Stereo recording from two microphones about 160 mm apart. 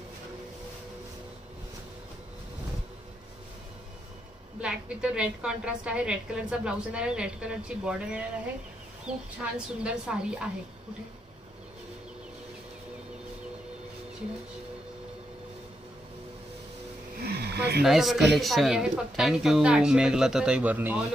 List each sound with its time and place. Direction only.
4.6 s a woman's voice: 5° right (ahead or behind)
17.2 s a sound: 85° right
17.8 s a woman's voice: centre (ahead or behind)